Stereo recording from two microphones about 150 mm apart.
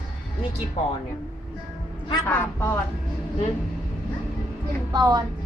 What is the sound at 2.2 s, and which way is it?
Speech, 15° left (ahead or behind).